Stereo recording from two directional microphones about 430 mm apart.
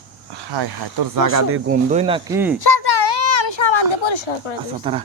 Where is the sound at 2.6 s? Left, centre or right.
Left.